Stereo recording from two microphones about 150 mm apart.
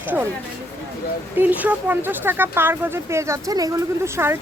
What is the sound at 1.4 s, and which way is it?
Speech, 10° right (ahead or behind).